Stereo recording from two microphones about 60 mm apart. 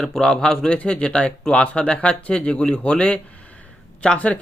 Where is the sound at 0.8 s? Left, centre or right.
Centre.